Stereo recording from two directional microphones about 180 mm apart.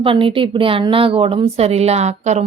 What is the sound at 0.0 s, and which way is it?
A woman's voice, 30° right (ahead or behind).